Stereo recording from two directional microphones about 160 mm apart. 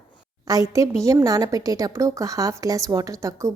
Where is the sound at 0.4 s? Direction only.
20° right (ahead or behind).